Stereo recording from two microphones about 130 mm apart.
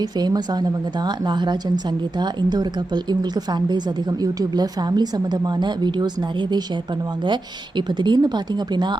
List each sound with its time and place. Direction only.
0.0 s speech: 30° right (ahead or behind)
7.8 s speech: 35° right (ahead or behind)